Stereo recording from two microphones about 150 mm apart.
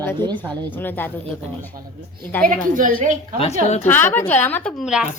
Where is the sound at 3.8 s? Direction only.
15° left (ahead or behind).